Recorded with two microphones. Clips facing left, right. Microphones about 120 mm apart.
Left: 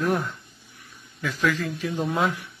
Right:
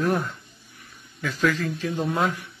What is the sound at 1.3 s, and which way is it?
Speech, 10° right (ahead or behind).